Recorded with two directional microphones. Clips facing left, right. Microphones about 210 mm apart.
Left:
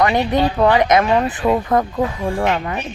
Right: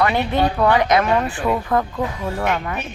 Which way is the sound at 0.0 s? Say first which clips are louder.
Left 2 dB; 20° left (ahead or behind).